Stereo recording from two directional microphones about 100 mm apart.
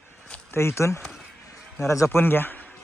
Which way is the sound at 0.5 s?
25° left (ahead or behind).